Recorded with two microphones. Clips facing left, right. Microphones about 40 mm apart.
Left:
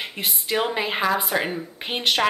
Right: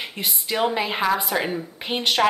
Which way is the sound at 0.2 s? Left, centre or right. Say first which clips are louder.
Right 1 dB; centre.